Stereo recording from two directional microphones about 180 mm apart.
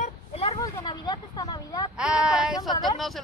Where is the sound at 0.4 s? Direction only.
25° left (ahead or behind).